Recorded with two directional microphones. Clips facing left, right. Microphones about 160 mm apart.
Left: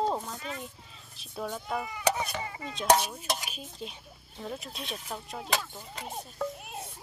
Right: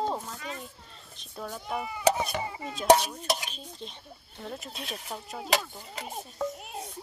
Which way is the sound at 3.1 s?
5° left (ahead or behind).